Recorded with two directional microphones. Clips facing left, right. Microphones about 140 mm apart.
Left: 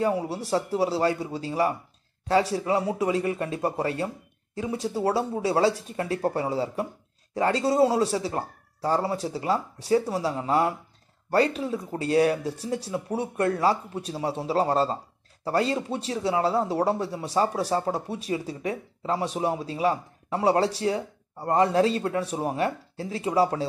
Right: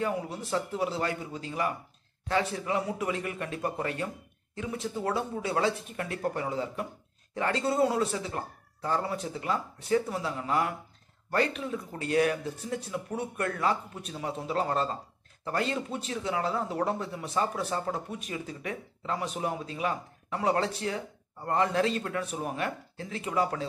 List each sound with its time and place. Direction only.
0.0 s speech: 35° left (ahead or behind)